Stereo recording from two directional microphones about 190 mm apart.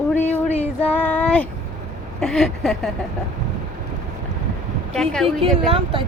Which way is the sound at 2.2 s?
5° left (ahead or behind).